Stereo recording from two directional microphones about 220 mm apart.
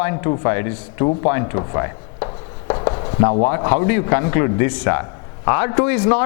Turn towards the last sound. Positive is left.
turn(degrees=10)  # may be behind; listen again after turning